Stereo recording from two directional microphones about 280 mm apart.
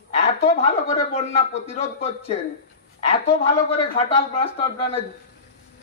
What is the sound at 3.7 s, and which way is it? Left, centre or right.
Speech, left.